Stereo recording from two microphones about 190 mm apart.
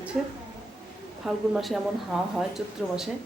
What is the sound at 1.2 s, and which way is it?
Speech, centre (ahead or behind).